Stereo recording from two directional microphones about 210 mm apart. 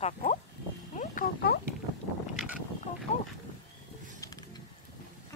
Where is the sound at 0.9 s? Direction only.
35° left (ahead or behind).